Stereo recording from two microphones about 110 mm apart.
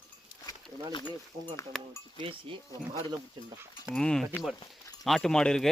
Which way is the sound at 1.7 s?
5° left (ahead or behind).